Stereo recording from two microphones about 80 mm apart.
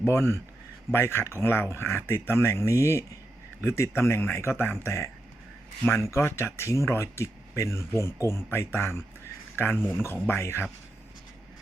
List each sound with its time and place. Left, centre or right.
0.0 s speech: left